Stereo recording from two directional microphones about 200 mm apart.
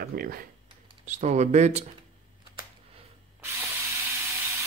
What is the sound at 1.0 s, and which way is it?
Speech, 35° right (ahead or behind).